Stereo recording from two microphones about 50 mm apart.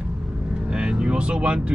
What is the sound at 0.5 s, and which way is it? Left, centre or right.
Vehicle, centre.